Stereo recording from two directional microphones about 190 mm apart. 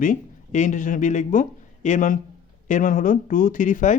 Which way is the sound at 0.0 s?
40° left (ahead or behind).